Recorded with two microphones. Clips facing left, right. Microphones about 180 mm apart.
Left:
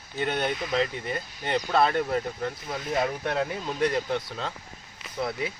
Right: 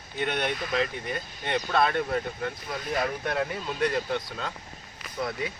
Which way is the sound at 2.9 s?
25° left (ahead or behind).